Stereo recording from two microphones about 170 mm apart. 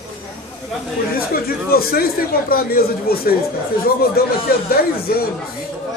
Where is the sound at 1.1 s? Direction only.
60° left (ahead or behind).